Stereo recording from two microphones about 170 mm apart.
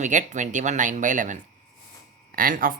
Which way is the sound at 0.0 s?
45° right (ahead or behind).